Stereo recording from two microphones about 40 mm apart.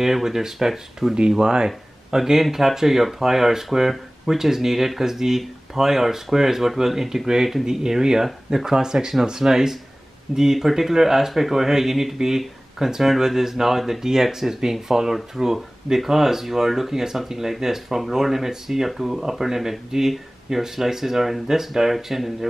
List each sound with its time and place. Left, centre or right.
0.0 s speech: centre